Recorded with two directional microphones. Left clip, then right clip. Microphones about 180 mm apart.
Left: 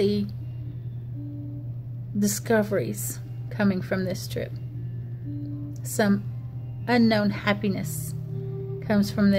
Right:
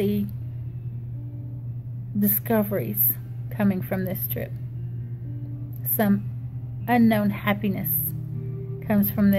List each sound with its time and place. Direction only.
0.0 s speech: 25° left (ahead or behind)
2.1 s speech: 20° left (ahead or behind)
5.9 s speech: 20° left (ahead or behind)